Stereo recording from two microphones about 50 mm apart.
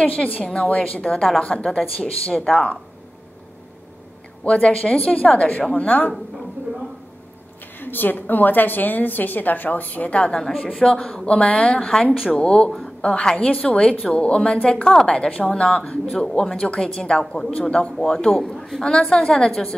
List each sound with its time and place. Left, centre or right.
0.0 s a woman's voice: left
4.5 s a woman's voice: left
6.1 s a sound: centre
7.8 s a woman's voice: left; by 19.7 s centre